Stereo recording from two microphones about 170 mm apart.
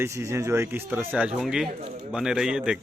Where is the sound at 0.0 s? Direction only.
15° right (ahead or behind).